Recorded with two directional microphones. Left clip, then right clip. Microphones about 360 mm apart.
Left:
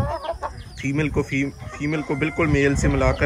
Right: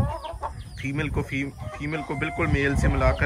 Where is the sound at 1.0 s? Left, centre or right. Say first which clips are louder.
Left 6 dB; centre.